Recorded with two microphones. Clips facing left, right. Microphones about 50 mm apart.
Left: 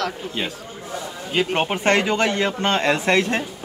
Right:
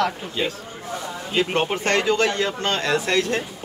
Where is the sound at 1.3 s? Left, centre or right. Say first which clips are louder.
Left 1 dB; centre.